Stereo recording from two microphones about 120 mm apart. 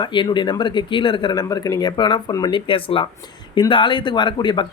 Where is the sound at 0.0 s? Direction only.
40° left (ahead or behind).